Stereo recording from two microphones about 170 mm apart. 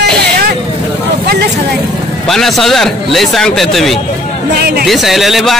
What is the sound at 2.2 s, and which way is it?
Speech, centre (ahead or behind).